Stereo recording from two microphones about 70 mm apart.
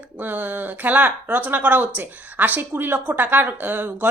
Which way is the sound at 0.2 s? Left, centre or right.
Right.